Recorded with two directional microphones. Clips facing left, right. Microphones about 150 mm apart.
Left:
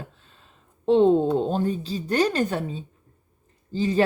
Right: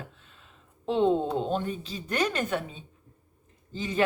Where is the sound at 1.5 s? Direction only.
35° left (ahead or behind).